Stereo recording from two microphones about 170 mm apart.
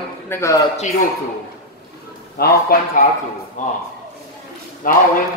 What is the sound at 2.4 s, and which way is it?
Speech, 60° left (ahead or behind).